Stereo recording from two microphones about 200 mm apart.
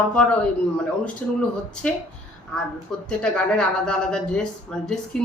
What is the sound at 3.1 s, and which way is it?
A woman's voice, 5° left (ahead or behind).